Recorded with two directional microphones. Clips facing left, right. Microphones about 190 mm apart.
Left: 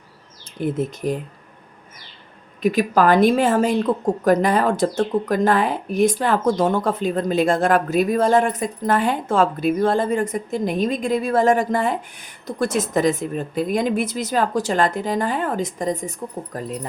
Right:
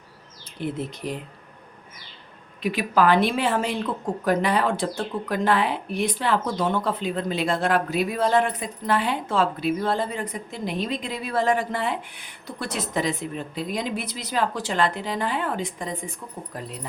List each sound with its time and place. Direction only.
0.6 s a woman's voice: 45° left (ahead or behind)
2.6 s a woman's voice: 45° left (ahead or behind)